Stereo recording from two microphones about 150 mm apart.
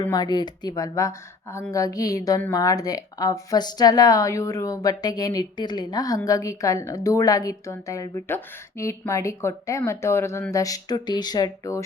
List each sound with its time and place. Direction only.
0.1 s speech: 30° left (ahead or behind)